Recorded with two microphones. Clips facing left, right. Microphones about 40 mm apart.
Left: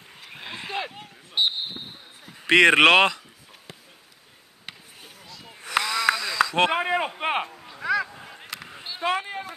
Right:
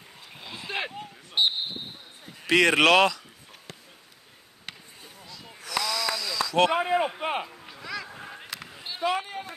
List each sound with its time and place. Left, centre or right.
0.3 s a sound: left
1.4 s speech: centre
1.8 s basketball bounce: centre
2.4 s speech: left
4.6 s basketball bounce: centre
5.6 s a sound: left
7.2 s speech: left
7.8 s a sound: centre
8.4 s sheep: centre
9.0 s speech: left